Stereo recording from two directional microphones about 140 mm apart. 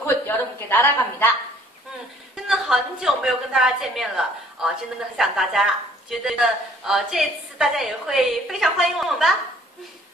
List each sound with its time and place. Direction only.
0.3 s a sound: 15° left (ahead or behind)
0.7 s a woman's voice: 15° left (ahead or behind)
2.3 s a woman's voice: centre (ahead or behind)